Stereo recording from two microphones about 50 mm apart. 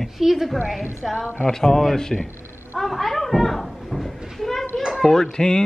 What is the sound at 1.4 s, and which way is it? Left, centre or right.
Speech, centre.